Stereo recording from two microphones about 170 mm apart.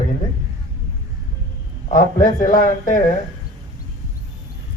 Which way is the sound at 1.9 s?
50° left (ahead or behind).